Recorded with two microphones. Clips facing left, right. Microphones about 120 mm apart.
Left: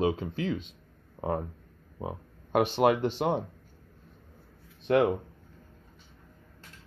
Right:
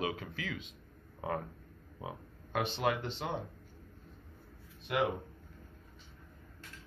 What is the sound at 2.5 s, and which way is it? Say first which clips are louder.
Speech: left 9 dB; 60° left (ahead or behind).